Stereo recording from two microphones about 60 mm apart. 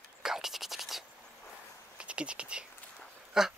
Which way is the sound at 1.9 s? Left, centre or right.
Centre.